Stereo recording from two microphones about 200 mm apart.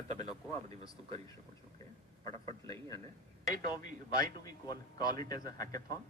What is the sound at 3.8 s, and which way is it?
Speech, 40° right (ahead or behind).